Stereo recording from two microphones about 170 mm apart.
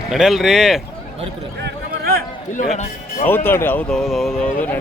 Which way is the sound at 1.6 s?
65° right (ahead or behind).